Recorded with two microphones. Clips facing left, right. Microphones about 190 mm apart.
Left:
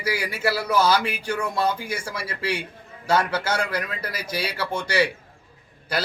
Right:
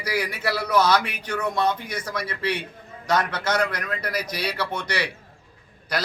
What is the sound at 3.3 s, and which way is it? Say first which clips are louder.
A man's voice: even; 30° left (ahead or behind).